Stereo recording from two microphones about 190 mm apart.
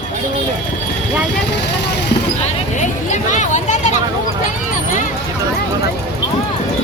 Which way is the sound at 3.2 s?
40° left (ahead or behind).